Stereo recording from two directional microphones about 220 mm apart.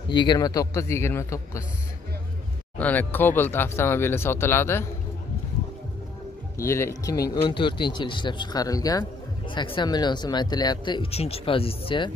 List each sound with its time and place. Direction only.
0.1 s speech: 20° left (ahead or behind)
2.8 s speech: 10° left (ahead or behind)
6.6 s speech: 10° left (ahead or behind)